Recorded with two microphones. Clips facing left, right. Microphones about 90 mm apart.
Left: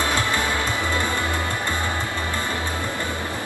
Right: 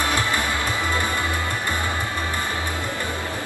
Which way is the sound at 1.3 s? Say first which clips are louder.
Even; 20° left (ahead or behind).